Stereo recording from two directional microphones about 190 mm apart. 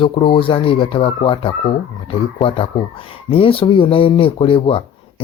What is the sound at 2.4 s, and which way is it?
Speech, 30° left (ahead or behind).